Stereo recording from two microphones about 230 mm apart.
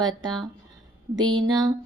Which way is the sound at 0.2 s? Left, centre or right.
Centre.